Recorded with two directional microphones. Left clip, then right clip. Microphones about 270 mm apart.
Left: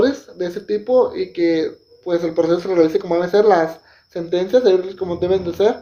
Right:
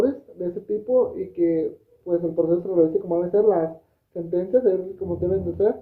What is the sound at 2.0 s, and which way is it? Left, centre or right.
Speech, left.